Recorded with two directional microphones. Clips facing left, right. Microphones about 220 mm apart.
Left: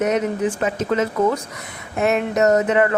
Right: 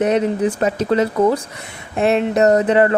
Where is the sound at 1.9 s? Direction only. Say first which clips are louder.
Right 3 dB; 30° right (ahead or behind).